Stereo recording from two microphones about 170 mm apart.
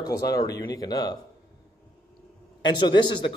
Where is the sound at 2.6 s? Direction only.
25° left (ahead or behind).